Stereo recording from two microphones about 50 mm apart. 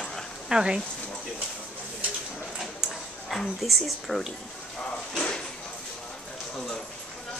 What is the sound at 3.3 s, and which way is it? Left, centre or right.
Speech, centre.